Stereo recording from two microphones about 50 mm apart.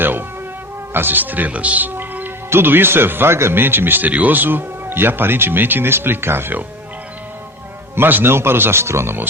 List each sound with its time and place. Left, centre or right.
0.0 s speech: right
7.9 s speech: right